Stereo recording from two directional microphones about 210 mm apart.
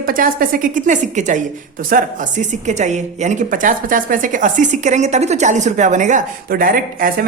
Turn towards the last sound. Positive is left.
turn(degrees=-40)  # may be behind; listen again after turning